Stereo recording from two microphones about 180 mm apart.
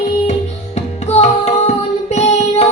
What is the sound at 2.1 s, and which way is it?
Child singing, 35° left (ahead or behind).